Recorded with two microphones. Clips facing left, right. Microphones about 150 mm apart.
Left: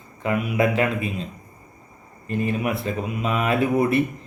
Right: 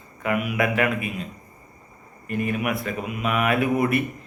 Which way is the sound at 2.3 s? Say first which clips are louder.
Left 1 dB; 30° left (ahead or behind).